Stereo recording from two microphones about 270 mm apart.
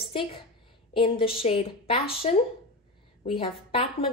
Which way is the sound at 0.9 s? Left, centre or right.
Centre.